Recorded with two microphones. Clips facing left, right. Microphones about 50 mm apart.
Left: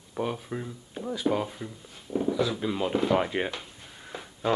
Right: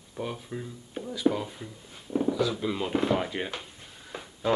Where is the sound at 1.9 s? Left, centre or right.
Centre.